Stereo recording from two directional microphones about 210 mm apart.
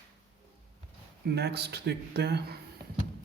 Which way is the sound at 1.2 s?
50° right (ahead or behind).